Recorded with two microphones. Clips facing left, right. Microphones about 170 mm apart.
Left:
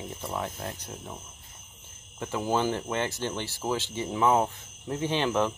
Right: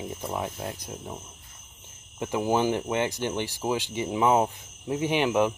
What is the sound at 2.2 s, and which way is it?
Speech, 15° right (ahead or behind).